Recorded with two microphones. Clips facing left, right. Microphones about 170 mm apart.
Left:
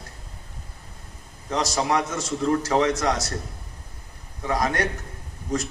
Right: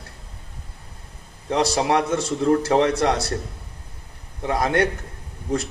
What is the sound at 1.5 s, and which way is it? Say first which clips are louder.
Speech: right 4 dB; 60° right (ahead or behind).